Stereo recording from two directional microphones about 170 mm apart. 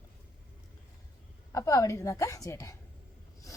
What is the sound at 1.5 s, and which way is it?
A woman's voice, 20° left (ahead or behind).